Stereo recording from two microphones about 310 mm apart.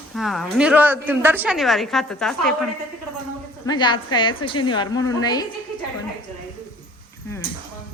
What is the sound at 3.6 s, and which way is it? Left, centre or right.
A woman's voice, centre.